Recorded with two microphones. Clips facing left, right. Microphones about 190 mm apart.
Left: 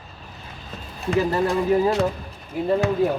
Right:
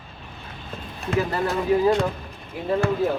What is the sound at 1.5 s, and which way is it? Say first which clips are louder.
Speech: even; 5° left (ahead or behind).